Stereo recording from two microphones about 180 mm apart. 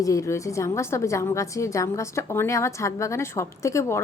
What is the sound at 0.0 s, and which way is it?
A woman's voice, 20° left (ahead or behind).